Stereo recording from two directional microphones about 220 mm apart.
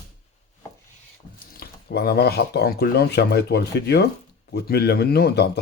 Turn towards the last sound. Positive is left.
turn(degrees=45)  # may be behind; listen again after turning